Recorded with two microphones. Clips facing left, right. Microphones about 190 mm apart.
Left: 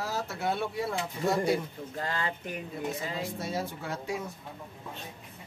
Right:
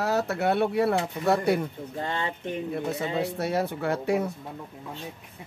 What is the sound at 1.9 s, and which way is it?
Speech, 25° right (ahead or behind).